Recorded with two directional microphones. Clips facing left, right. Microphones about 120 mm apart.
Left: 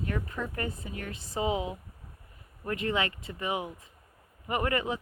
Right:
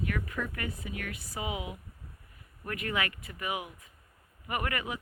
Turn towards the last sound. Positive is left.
turn(degrees=25)  # may be behind; listen again after turning